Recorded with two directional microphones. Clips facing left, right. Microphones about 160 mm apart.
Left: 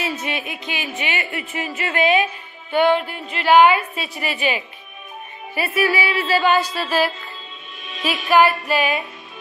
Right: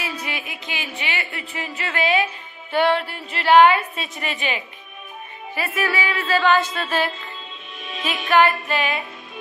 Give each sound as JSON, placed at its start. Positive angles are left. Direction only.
{"t": 0.0, "sound": "speech", "side_deg": 25}
{"t": 2.7, "sound": "a woman's voice", "side_deg": 0}
{"t": 5.5, "sound": "speech", "side_deg": 15}
{"t": 8.0, "sound": "speech", "side_deg": 10}